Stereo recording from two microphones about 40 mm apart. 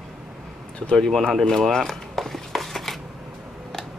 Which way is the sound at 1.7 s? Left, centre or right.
Centre.